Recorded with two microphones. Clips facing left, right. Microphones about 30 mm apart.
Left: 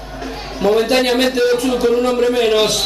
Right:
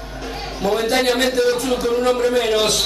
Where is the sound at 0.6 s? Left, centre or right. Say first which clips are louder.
Left 4 dB; centre.